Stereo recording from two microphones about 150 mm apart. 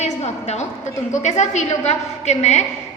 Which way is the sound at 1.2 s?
50° left (ahead or behind).